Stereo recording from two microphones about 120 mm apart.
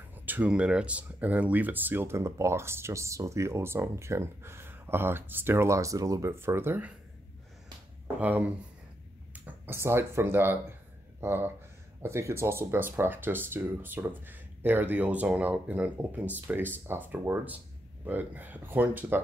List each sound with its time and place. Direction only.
0.1 s speech: 15° right (ahead or behind)
8.2 s speech: 15° right (ahead or behind)